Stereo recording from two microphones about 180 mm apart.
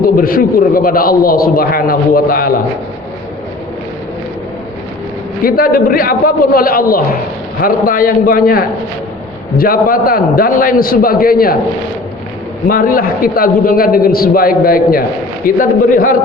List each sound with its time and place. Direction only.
0.0 s a man's voice: 55° left (ahead or behind)
5.4 s a man's voice: 55° left (ahead or behind)
12.6 s a man's voice: 50° left (ahead or behind)